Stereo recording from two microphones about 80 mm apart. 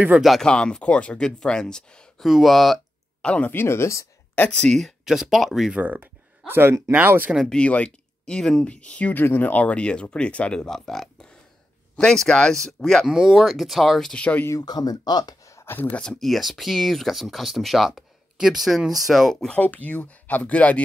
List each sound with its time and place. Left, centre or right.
0.2 s speech: centre
0.5 s speech: centre
2.2 s speech: centre
3.2 s speech: centre
3.5 s speech: left
4.4 s speech: centre
5.8 s speech: right
7.4 s speech: centre
13.0 s speech: centre
14.6 s speech: left
15.4 s a sound: left
15.7 s speech: left
16.0 s speech: centre
19.4 s speech: centre